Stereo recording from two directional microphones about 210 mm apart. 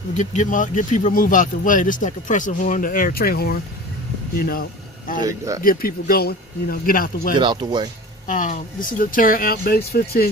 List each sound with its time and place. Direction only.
0.1 s speech: 35° left (ahead or behind)
5.2 s speech: 15° right (ahead or behind)
5.6 s speech: 45° left (ahead or behind)
7.3 s speech: 20° right (ahead or behind)
8.3 s speech: 35° left (ahead or behind)